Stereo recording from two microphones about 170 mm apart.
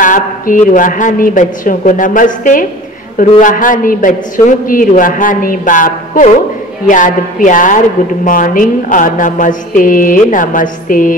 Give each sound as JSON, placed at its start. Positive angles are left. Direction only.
{"t": 0.0, "sound": "a man's voice", "side_deg": 50}